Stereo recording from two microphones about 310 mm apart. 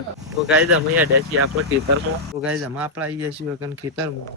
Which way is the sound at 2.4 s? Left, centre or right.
Centre.